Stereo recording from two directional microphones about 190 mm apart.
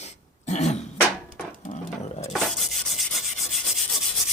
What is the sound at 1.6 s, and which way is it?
Roaring cats, 40° left (ahead or behind).